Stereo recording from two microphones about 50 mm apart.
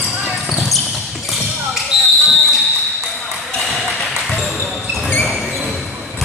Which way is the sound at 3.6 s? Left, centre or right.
Centre.